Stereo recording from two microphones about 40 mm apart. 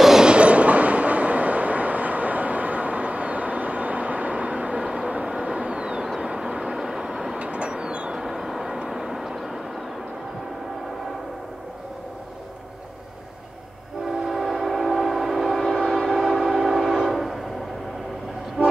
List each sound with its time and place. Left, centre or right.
0.0 s train: centre
0.3 s train: right
6.2 s vehicle: centre
7.3 s train: right
8.2 s vehicle: centre
14.0 s train: centre